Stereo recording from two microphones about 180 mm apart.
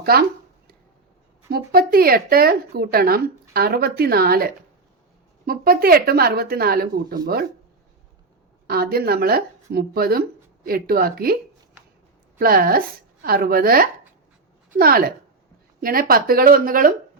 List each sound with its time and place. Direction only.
0.0 s speech: 55° right (ahead or behind)
1.5 s speech: 60° right (ahead or behind)
8.6 s speech: 60° right (ahead or behind)
12.4 s speech: 55° right (ahead or behind)